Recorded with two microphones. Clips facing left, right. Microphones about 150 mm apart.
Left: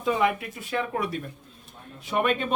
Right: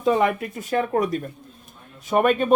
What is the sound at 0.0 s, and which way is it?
Speech, 45° right (ahead or behind).